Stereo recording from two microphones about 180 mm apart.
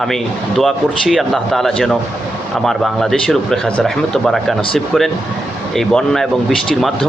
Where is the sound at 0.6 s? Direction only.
Centre (ahead or behind).